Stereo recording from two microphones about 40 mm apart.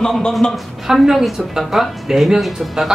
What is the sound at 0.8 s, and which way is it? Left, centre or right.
A man's voice, centre.